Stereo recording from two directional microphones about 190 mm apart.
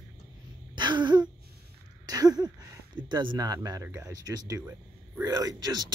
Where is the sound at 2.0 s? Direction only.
20° right (ahead or behind).